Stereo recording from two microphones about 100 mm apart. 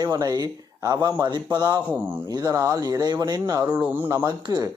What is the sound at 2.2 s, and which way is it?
Speech, 40° right (ahead or behind).